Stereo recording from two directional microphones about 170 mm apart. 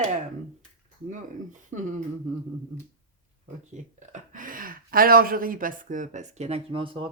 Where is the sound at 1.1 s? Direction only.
45° right (ahead or behind).